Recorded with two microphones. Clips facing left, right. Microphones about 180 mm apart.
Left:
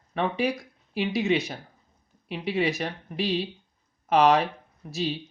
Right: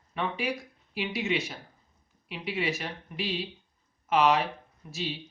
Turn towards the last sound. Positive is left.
turn(degrees=35)  # may be behind; listen again after turning